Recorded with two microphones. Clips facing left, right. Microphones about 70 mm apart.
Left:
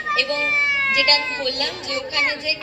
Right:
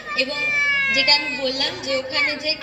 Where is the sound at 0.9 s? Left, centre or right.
Left.